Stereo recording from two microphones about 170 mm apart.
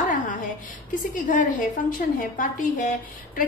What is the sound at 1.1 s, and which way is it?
A woman's voice, 50° left (ahead or behind).